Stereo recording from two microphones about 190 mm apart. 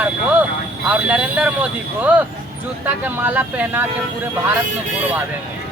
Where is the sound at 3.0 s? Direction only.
10° right (ahead or behind).